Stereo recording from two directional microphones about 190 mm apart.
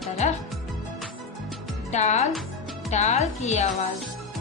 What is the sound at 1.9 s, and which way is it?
A woman's voice, 35° left (ahead or behind).